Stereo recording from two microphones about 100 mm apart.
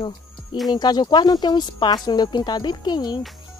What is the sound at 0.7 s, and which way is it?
Speech, 45° left (ahead or behind).